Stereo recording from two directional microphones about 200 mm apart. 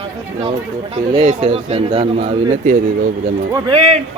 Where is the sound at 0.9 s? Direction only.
30° right (ahead or behind).